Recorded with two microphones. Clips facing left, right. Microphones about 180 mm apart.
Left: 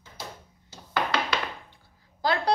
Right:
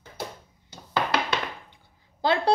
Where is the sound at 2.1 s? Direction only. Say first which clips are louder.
Right 3 dB; 25° right (ahead or behind).